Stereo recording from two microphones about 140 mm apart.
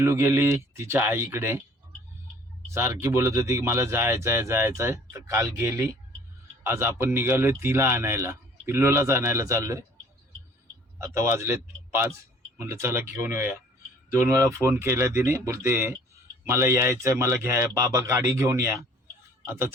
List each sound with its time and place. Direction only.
0.0 s a man's voice: 20° right (ahead or behind)
2.7 s a man's voice: 20° right (ahead or behind)
11.0 s a man's voice: 20° right (ahead or behind)